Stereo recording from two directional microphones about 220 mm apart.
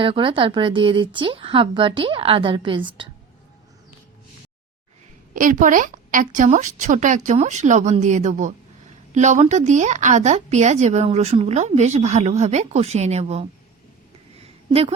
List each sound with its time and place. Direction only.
0.0 s speech: 25° right (ahead or behind)
5.3 s a woman's voice: 35° right (ahead or behind)
14.7 s a woman's voice: 25° right (ahead or behind)